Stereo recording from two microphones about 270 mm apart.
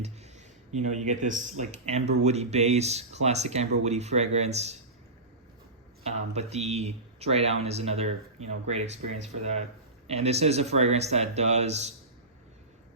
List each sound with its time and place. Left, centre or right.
0.0 s speech: right
6.0 s speech: right